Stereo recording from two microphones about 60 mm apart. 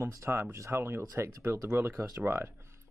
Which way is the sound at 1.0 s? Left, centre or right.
Right.